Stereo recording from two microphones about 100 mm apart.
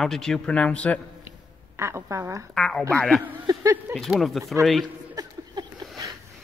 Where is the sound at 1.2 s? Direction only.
25° right (ahead or behind).